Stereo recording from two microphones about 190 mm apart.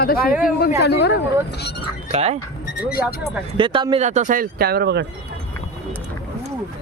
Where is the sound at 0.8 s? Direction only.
60° left (ahead or behind).